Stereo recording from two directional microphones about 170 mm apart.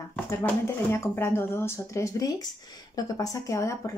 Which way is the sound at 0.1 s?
15° left (ahead or behind).